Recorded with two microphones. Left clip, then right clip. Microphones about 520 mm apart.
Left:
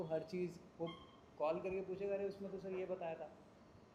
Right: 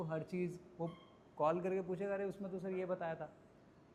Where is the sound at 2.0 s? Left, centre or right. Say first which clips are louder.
Right 1 dB; right.